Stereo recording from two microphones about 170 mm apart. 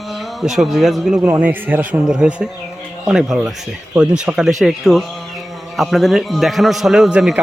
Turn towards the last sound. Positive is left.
turn(degrees=0)  # may be behind; listen again after turning